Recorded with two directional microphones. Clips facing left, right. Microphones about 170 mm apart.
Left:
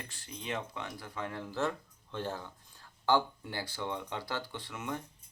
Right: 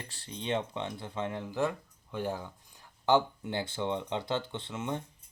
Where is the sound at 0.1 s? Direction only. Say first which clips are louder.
Right 7 dB; 30° right (ahead or behind).